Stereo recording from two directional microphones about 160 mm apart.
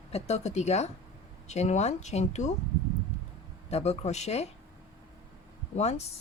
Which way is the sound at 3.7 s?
40° left (ahead or behind).